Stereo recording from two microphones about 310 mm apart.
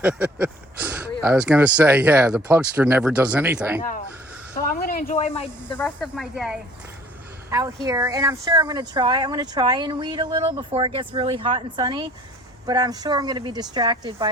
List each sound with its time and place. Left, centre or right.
0.0 s speech: centre
4.5 s snake: left
5.7 s speech: centre
7.9 s speech: centre